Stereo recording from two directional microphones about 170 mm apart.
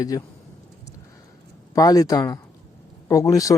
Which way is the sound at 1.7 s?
20° left (ahead or behind).